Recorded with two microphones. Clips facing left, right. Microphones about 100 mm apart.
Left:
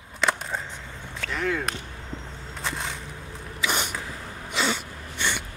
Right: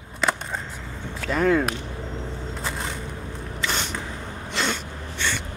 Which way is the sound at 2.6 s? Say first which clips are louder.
Even; centre (ahead or behind).